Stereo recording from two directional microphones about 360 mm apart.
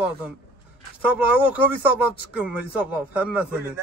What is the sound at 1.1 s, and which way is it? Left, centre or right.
Speech, centre.